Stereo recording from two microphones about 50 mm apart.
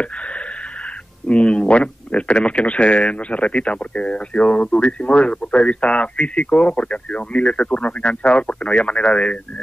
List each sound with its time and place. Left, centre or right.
1.2 s speech: left